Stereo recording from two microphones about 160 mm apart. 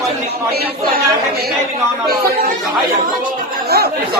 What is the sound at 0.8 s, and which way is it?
Speech, 80° right.